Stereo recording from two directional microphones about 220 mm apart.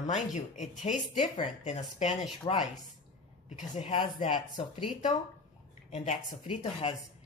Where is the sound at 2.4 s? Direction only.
20° left (ahead or behind).